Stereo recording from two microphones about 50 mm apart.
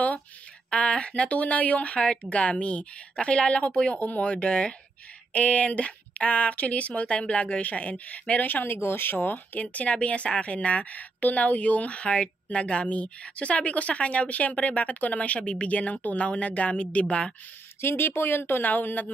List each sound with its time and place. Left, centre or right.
0.7 s speech: left
8.7 s speech: left
17.7 s speech: left